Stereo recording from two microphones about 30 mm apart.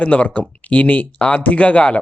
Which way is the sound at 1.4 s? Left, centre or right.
Left.